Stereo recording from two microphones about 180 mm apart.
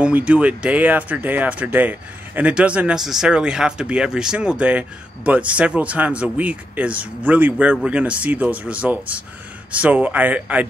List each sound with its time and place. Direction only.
0.0 s speech: 5° right (ahead or behind)